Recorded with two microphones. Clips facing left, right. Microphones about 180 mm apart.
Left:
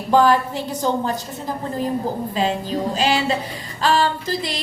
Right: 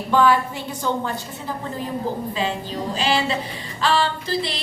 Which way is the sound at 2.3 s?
40° left (ahead or behind).